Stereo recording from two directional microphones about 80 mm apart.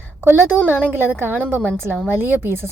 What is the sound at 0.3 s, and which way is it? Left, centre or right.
A woman's voice, right.